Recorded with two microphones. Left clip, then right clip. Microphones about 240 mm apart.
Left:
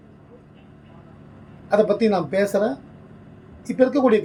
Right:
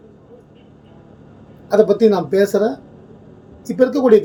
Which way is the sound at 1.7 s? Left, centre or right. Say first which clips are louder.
Right 5 dB; centre.